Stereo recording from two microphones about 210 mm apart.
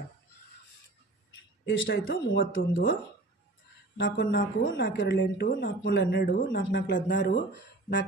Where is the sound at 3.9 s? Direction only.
55° left (ahead or behind).